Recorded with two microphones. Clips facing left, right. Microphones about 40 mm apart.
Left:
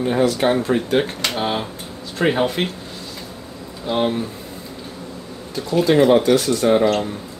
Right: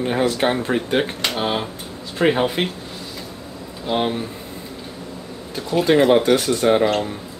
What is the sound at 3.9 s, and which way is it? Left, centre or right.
Speech, centre.